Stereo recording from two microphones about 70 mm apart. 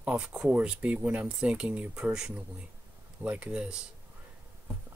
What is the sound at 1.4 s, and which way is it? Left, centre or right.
Speech, centre.